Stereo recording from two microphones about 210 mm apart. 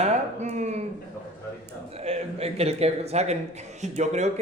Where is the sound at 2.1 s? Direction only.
30° right (ahead or behind).